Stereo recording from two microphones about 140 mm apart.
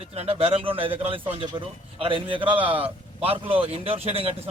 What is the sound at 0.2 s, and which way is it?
A man's voice, 45° right (ahead or behind).